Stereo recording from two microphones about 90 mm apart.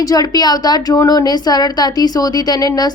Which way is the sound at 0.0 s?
45° left (ahead or behind).